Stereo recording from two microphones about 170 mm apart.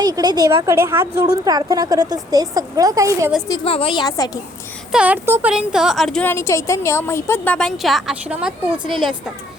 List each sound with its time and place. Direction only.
0.0 s a woman's voice: 25° right (ahead or behind)
3.5 s a woman's voice: 35° left (ahead or behind)
4.9 s speech: 5° right (ahead or behind)
6.2 s a woman's voice: 15° left (ahead or behind); by 9.1 s centre (ahead or behind)